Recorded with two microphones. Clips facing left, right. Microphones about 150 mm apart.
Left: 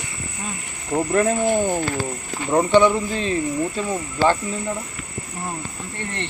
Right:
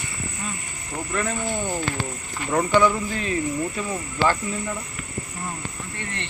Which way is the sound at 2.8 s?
25° left (ahead or behind).